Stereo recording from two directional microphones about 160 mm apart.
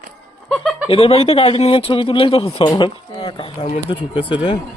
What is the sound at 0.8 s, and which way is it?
Speech, 35° left (ahead or behind).